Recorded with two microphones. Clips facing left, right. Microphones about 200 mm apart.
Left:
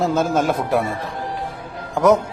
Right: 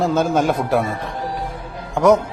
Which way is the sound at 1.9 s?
Centre (ahead or behind).